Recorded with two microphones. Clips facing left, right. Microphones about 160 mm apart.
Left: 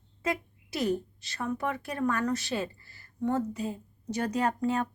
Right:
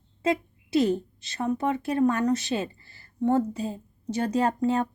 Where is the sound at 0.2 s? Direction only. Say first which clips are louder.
Right 6 dB; 25° right (ahead or behind).